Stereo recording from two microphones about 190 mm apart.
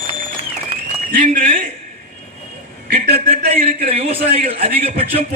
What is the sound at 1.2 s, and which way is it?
Speech, 45° right (ahead or behind).